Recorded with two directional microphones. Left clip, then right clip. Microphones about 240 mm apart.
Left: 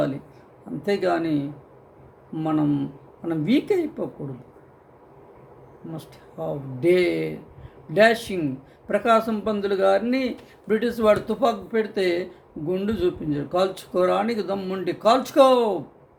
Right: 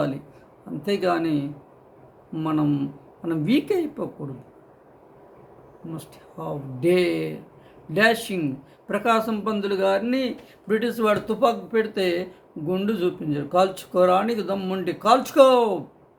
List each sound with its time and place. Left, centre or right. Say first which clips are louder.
0.8 s a man's voice: even; centre
6.0 s a man's voice: left 7 dB; centre